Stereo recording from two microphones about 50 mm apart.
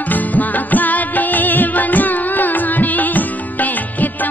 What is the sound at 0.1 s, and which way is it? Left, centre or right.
Music, left.